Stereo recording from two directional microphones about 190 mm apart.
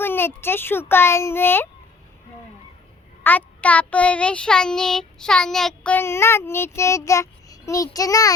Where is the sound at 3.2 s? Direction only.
10° left (ahead or behind).